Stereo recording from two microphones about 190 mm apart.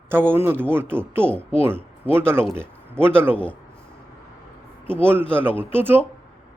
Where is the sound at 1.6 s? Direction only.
10° right (ahead or behind).